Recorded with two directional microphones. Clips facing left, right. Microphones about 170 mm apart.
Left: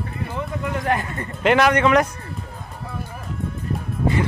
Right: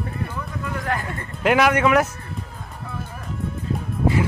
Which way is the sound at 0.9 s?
20° left (ahead or behind).